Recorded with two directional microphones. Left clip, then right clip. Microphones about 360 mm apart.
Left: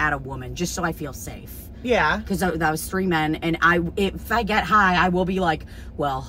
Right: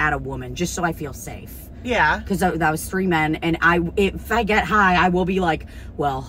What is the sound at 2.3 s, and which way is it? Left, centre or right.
Speech, centre.